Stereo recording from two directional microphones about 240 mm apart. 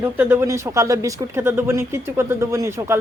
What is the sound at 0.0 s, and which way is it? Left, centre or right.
Speech, centre.